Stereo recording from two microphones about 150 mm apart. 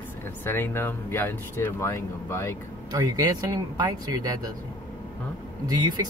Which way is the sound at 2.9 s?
25° right (ahead or behind).